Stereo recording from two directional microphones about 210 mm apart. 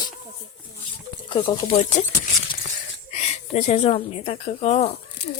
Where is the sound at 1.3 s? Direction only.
20° left (ahead or behind).